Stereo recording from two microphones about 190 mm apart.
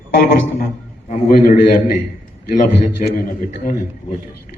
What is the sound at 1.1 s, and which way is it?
A man's voice, 45° left (ahead or behind).